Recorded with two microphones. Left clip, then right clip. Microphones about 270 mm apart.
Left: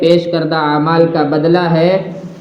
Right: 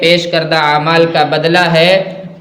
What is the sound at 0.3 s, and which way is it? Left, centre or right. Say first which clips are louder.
A man's voice: right 3 dB; right.